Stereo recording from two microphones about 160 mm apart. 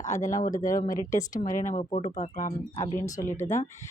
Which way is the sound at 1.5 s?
55° left (ahead or behind).